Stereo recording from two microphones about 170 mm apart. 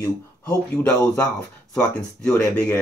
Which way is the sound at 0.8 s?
5° left (ahead or behind).